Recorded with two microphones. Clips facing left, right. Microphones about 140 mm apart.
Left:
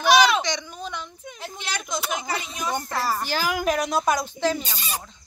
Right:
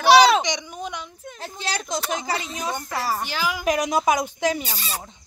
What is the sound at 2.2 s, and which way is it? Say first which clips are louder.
Speech: right 2 dB; 30° right (ahead or behind).